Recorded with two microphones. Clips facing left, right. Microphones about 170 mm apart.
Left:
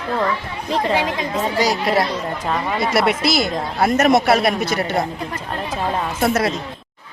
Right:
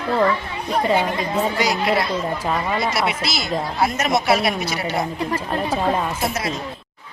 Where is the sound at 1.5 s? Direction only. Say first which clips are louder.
Left 2 dB; 35° left (ahead or behind).